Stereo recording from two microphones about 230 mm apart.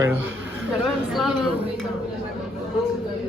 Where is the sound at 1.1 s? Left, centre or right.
Centre.